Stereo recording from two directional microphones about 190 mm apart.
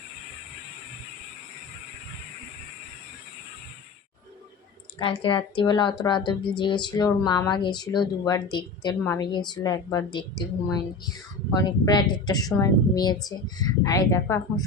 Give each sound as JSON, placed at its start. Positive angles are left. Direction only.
{"t": 4.9, "sound": "speech", "side_deg": 25}